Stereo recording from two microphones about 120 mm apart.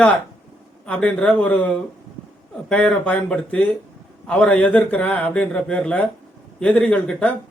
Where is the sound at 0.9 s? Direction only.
10° left (ahead or behind).